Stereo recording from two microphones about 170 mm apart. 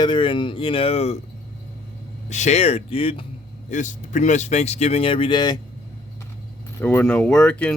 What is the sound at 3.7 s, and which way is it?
Speech, 45° left (ahead or behind).